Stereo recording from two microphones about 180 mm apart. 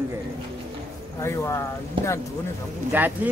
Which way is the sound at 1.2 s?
15° left (ahead or behind).